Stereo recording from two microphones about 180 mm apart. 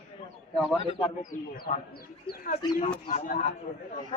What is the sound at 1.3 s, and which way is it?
Speech, 50° left (ahead or behind).